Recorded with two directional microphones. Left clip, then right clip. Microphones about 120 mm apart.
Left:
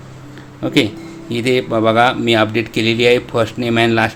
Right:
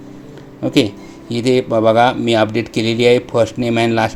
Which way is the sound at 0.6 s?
30° right (ahead or behind).